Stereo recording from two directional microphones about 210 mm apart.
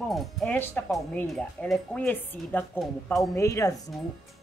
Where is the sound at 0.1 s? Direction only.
Centre (ahead or behind).